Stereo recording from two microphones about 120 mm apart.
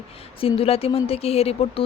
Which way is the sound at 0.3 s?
50° left (ahead or behind).